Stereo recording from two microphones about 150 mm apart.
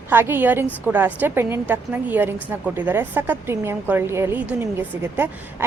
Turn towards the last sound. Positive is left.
turn(degrees=-15)  # may be behind; listen again after turning